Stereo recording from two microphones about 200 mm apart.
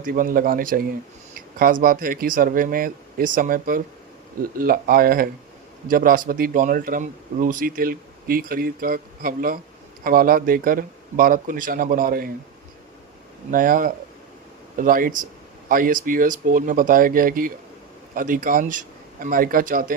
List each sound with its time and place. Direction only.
0.0 s speech: 45° right (ahead or behind)
13.5 s speech: 45° right (ahead or behind)